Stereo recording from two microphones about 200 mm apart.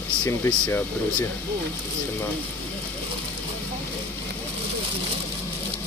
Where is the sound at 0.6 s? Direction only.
5° left (ahead or behind).